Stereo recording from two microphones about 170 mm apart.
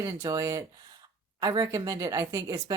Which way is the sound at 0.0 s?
20° right (ahead or behind).